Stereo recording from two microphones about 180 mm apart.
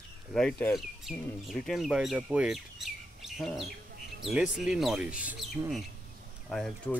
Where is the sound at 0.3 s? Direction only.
5° left (ahead or behind).